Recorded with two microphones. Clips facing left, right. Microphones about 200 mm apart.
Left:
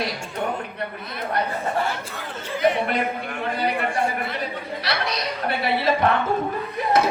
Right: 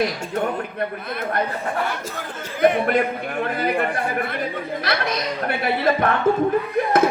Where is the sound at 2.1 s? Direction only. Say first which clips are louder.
Right 1 dB; 50° right (ahead or behind).